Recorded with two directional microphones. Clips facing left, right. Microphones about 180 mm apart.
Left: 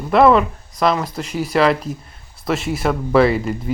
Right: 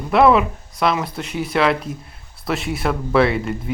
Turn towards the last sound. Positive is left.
turn(degrees=0)  # may be behind; listen again after turning